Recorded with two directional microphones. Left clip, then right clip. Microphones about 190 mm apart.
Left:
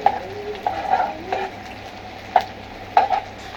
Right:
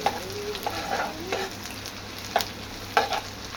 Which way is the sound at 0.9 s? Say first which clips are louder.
Left 10 dB; 30° right (ahead or behind).